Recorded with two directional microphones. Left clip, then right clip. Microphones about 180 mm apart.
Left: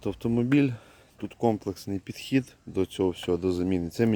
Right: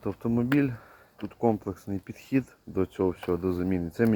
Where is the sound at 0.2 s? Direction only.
55° left (ahead or behind); by 3.7 s 35° left (ahead or behind).